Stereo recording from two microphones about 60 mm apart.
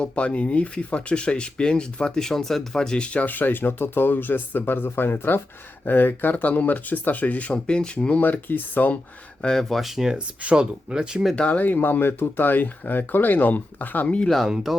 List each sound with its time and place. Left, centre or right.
0.0 s speech: centre
8.2 s speech: left
9.4 s speech: centre
11.3 s speech: centre
11.6 s speech: left
14.2 s speech: centre